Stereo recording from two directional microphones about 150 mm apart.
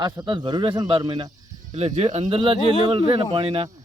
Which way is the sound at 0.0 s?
30° right (ahead or behind).